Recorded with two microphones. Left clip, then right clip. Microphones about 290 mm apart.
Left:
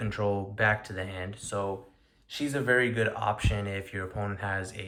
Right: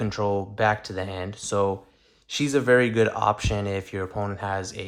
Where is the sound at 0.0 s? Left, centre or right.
Centre.